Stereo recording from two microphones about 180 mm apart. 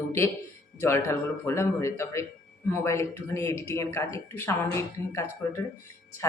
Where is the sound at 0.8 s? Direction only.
15° left (ahead or behind).